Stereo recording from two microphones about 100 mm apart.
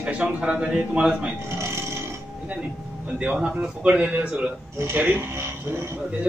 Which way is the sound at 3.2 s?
10° right (ahead or behind).